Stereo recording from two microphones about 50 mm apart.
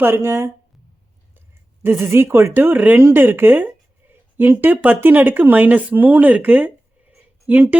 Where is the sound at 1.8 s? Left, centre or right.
Right.